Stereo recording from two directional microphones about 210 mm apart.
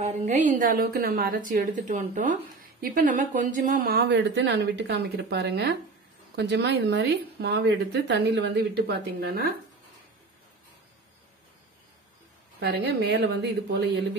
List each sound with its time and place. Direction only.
0.0 s a woman's voice: 35° right (ahead or behind)
12.5 s a woman's voice: 50° right (ahead or behind)